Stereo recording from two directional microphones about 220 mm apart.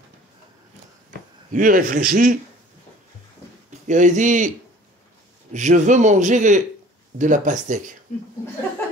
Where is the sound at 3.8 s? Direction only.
35° right (ahead or behind).